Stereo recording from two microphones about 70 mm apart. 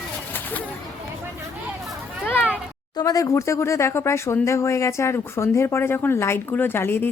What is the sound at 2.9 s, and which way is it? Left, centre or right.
Speech, left.